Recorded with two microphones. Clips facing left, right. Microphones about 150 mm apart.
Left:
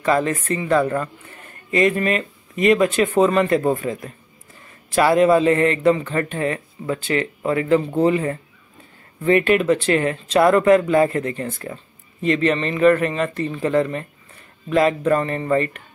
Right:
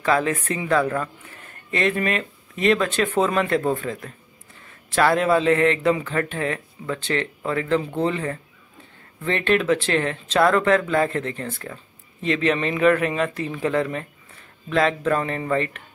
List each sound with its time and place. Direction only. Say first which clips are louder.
0.0 s speech: left 2 dB; centre (ahead or behind)
4.9 s speech: left 4 dB; 5° left (ahead or behind)